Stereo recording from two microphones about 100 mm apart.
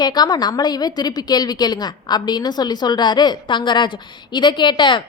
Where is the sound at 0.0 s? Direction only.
45° left (ahead or behind).